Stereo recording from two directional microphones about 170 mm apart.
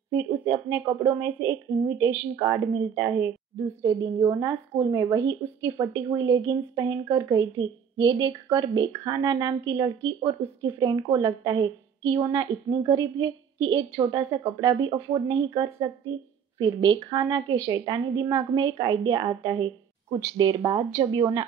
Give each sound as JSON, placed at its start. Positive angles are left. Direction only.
{"t": 0.1, "sound": "a woman's voice", "side_deg": -20}